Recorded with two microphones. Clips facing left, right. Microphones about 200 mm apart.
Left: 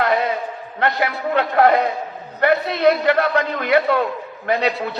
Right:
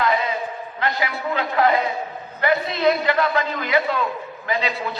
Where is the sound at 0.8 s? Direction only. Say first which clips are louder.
Left 4 dB; 60° left (ahead or behind).